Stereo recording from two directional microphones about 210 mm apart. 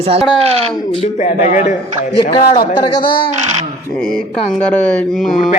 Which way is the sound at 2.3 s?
20° left (ahead or behind).